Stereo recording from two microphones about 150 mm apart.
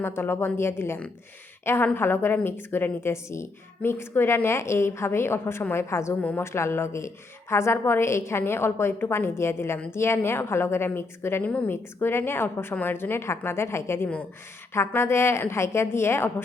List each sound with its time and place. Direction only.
0.0 s a woman's voice: 15° left (ahead or behind)